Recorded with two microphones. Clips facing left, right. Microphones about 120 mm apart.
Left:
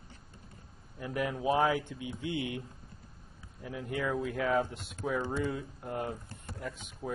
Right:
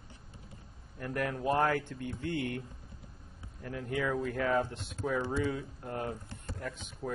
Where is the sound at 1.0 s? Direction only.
5° left (ahead or behind).